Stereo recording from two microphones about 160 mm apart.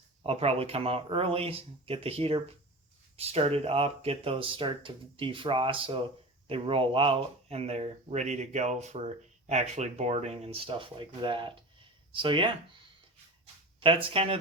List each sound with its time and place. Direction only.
0.2 s speech: 40° right (ahead or behind)
13.7 s speech: 35° right (ahead or behind)